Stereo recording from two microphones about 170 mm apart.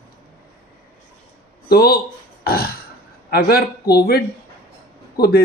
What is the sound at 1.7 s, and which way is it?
Speech, 65° left (ahead or behind).